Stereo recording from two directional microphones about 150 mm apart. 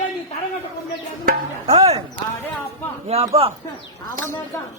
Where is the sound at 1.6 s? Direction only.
45° right (ahead or behind).